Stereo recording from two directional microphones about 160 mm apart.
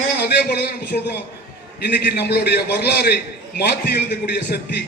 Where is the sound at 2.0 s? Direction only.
90° left.